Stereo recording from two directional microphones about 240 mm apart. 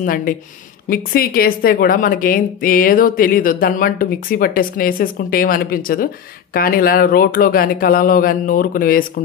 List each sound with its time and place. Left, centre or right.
0.0 s a woman's voice: left